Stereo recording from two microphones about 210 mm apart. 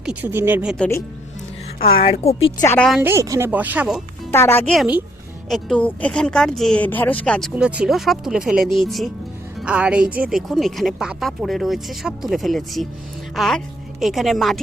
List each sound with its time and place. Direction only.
0.0 s speech: 5° right (ahead or behind)
1.8 s a woman's voice: 25° left (ahead or behind)
2.6 s speech: 5° left (ahead or behind)
3.0 s speech: 15° right (ahead or behind)
4.3 s a woman's voice: 10° left (ahead or behind)